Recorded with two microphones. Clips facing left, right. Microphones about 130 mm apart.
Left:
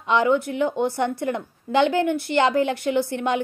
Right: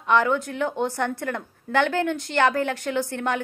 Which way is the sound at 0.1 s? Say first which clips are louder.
Left 2 dB; 15° left (ahead or behind).